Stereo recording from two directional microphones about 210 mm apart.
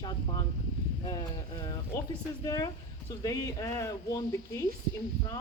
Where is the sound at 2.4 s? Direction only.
20° left (ahead or behind).